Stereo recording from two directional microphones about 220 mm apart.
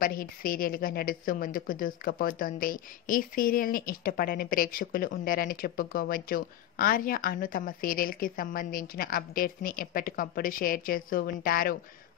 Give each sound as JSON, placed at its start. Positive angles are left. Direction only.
{"t": 0.0, "sound": "a woman's voice", "side_deg": 40}